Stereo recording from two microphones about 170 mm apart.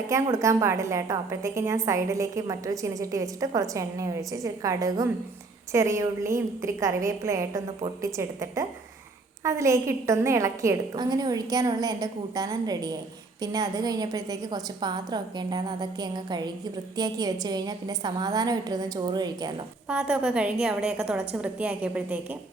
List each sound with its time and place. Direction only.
0.1 s a woman's voice: 15° right (ahead or behind)
19.9 s a woman's voice: 5° right (ahead or behind)